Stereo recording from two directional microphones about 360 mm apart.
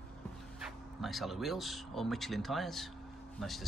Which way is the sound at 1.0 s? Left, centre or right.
Centre.